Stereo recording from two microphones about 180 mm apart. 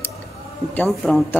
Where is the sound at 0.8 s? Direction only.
Centre (ahead or behind).